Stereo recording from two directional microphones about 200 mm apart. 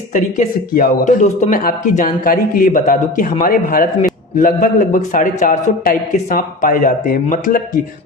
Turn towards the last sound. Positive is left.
turn(degrees=40)  # may be behind; listen again after turning